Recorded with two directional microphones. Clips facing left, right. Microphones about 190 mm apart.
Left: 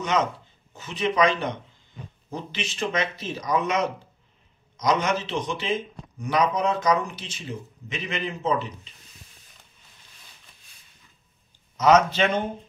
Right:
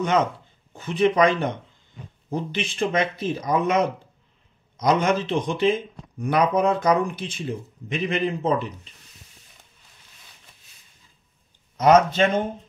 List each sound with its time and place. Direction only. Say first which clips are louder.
0.7 s speech: right 4 dB; 55° right (ahead or behind)
11.7 s speech: right 2 dB; 55° right (ahead or behind)